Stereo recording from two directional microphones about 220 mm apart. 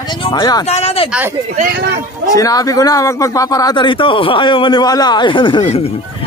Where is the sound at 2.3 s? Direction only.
15° left (ahead or behind).